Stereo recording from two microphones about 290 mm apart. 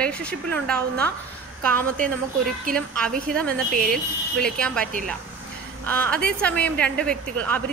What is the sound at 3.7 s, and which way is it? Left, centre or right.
Speech, right.